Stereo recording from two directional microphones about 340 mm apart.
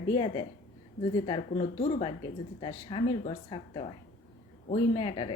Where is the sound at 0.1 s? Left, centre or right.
Centre.